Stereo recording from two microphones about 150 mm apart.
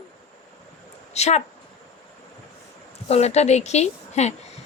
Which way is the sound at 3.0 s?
45° left (ahead or behind).